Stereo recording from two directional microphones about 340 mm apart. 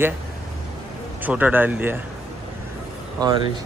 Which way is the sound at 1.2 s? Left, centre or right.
Centre.